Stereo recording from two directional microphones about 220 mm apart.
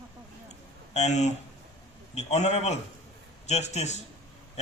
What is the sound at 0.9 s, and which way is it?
Speech, 30° left (ahead or behind).